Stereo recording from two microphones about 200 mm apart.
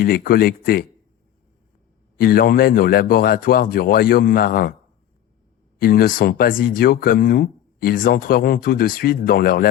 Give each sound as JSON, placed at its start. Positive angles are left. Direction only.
{"t": 0.0, "sound": "speech", "side_deg": 45}
{"t": 2.1, "sound": "speech", "side_deg": 45}
{"t": 5.8, "sound": "speech", "side_deg": 45}